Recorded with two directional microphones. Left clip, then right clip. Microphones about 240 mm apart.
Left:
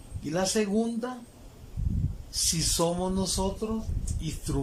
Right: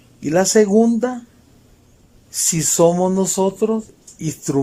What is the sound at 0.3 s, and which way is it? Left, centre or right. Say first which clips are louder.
Speech: right 14 dB; right.